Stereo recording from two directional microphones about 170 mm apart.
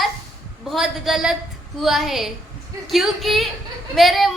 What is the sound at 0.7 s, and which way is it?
Child singing, centre (ahead or behind).